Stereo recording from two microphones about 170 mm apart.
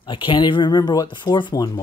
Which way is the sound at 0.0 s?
30° left (ahead or behind).